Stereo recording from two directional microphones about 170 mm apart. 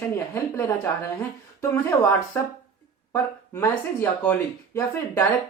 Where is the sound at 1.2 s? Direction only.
15° left (ahead or behind).